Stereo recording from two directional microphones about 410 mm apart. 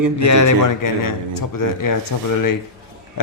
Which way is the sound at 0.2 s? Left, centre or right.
Left.